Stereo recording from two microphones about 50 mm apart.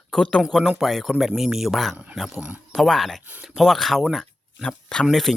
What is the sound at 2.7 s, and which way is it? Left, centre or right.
Speech, centre.